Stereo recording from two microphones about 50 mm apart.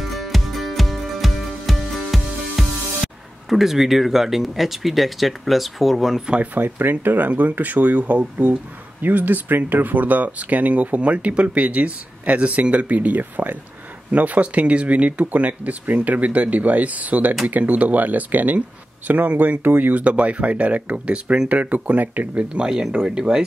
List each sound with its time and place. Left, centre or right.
0.0 s music: centre
6.3 s speech: right; by 23.4 s centre